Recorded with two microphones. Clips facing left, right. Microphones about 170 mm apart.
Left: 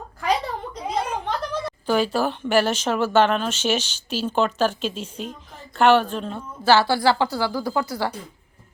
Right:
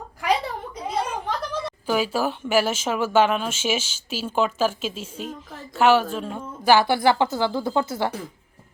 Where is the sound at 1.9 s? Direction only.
5° right (ahead or behind).